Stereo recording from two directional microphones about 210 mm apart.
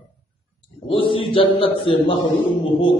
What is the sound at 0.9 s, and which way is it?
A man's voice, 25° left (ahead or behind).